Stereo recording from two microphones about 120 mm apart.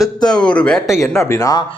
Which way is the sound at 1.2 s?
25° left (ahead or behind).